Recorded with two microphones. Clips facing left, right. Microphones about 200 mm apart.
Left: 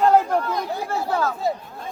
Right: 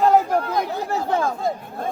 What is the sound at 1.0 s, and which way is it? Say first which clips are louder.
Speech: right 1 dB; 25° right (ahead or behind).